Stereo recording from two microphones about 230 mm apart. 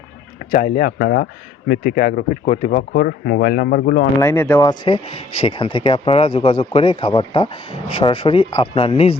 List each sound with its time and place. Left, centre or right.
0.5 s speech: left
4.2 s speech: centre
4.8 s speech: left